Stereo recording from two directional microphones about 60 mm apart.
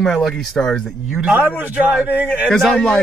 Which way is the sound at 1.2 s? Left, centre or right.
Right.